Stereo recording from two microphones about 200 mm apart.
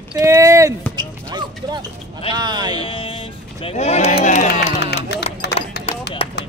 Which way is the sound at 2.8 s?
25° left (ahead or behind).